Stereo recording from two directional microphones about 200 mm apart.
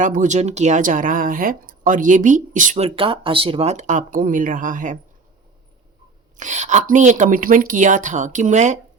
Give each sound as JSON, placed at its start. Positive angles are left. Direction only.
{"t": 0.0, "sound": "speech", "side_deg": -40}
{"t": 6.3, "sound": "speech", "side_deg": -35}